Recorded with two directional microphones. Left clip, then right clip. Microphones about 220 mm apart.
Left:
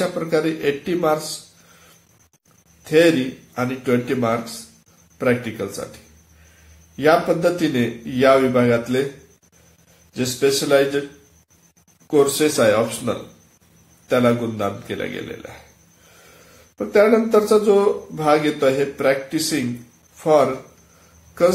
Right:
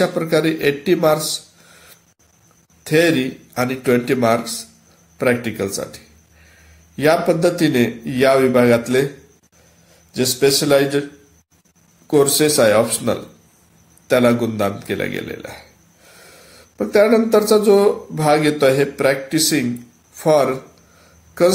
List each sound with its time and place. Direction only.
0.0 s speech: 40° right (ahead or behind)
2.8 s speech: 40° right (ahead or behind)
7.0 s speech: 40° right (ahead or behind)
10.1 s speech: 40° right (ahead or behind)
12.1 s speech: 40° right (ahead or behind)
16.7 s speech: 40° right (ahead or behind)